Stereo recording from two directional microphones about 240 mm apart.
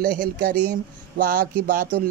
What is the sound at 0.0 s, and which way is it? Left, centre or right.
Speech, right.